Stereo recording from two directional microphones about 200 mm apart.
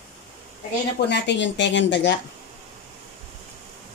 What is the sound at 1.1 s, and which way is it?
Speech, 60° left (ahead or behind).